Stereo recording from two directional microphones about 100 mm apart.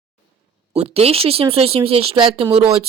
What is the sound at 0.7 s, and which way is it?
Speech, 90° right.